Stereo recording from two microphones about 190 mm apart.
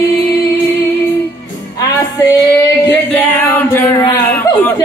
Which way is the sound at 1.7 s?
20° left (ahead or behind).